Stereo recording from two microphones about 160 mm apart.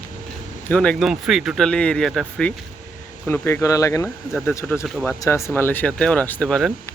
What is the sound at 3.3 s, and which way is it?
Speech, 15° left (ahead or behind).